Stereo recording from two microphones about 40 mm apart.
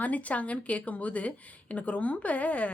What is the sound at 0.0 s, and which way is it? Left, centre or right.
A woman's voice, left.